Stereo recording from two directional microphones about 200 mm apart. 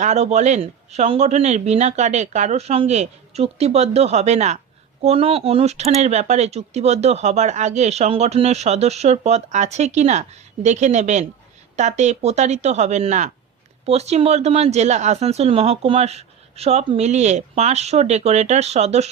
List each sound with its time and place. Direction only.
0.0 s speech: 35° right (ahead or behind)